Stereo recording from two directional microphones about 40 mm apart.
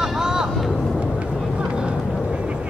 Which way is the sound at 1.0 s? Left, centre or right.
Right.